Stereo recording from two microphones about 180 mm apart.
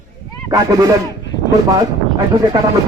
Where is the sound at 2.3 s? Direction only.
20° right (ahead or behind).